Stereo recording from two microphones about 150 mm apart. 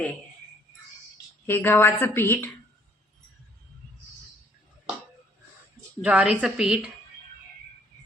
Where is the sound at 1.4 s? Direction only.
15° left (ahead or behind).